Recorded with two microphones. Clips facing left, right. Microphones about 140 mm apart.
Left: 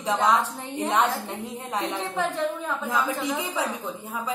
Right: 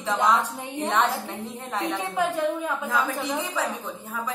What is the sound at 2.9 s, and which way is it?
Speech, 15° left (ahead or behind).